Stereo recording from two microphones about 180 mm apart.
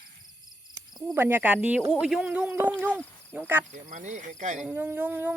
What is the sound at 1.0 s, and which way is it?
Speech, 10° right (ahead or behind).